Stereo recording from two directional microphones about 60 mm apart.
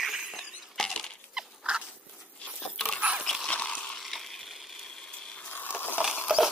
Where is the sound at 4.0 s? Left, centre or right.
Centre.